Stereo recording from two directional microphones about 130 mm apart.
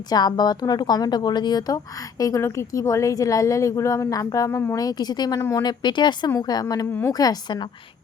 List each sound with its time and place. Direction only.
0.1 s a woman's voice: 30° left (ahead or behind)
5.6 s speech: 35° left (ahead or behind)